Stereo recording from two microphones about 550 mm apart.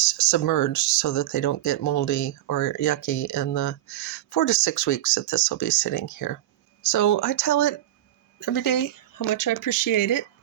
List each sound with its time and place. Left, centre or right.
0.3 s speech: left